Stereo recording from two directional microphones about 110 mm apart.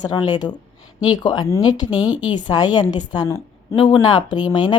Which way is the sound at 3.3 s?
20° left (ahead or behind).